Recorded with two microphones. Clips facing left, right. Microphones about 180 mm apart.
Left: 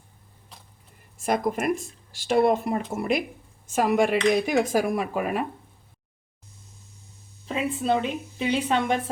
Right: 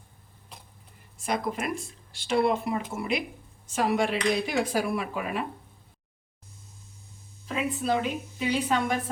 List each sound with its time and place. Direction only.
1.2 s speech: 45° left (ahead or behind)
7.4 s a woman's voice: 30° left (ahead or behind)